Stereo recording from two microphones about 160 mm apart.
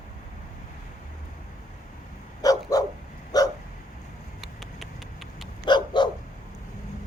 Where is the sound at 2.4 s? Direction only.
20° left (ahead or behind).